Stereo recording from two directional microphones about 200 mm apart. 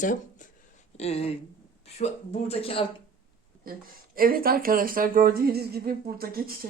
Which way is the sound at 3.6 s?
45° right (ahead or behind).